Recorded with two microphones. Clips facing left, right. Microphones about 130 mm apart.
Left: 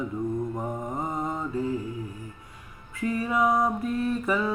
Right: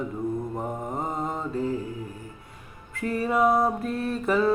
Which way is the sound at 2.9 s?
60° right (ahead or behind).